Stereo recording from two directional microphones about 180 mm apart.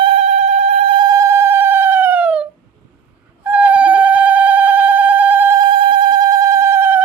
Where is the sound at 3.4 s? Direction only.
10° right (ahead or behind).